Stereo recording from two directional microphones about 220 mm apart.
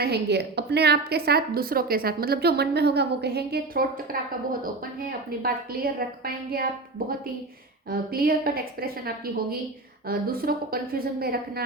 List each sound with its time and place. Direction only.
0.0 s a woman's voice: 50° right (ahead or behind)
7.9 s a woman's voice: 45° right (ahead or behind)